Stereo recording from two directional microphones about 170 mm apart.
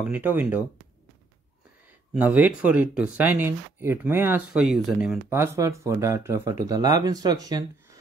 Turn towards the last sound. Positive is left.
turn(degrees=-25)  # may be behind; listen again after turning